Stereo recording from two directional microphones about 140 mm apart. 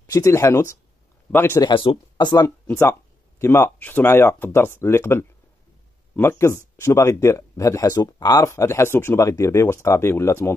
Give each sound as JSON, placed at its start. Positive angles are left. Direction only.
{"t": 0.0, "sound": "speech", "side_deg": 20}
{"t": 1.6, "sound": "speech", "side_deg": 40}
{"t": 2.6, "sound": "speech", "side_deg": 20}